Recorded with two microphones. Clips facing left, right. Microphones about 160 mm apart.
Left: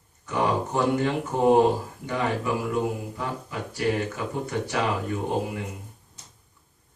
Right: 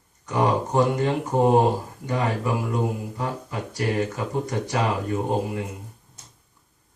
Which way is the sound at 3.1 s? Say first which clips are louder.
Right 2 dB; 40° right (ahead or behind).